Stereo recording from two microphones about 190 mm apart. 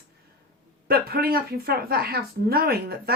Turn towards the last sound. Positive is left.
turn(degrees=-55)  # may be behind; listen again after turning